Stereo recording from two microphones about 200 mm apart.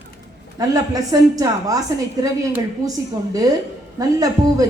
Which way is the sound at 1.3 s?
15° right (ahead or behind).